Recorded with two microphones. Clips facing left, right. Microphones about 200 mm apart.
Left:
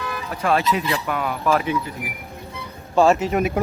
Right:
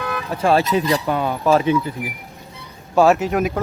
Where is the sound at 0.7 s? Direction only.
35° right (ahead or behind).